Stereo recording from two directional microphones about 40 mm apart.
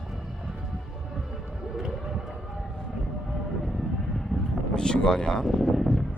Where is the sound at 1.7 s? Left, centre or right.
Centre.